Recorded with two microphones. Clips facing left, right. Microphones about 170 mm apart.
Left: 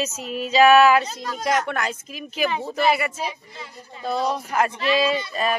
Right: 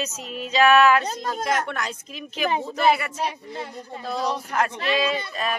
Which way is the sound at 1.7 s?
5° left (ahead or behind).